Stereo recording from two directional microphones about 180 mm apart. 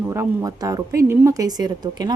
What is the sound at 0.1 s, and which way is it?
Speech, 20° right (ahead or behind).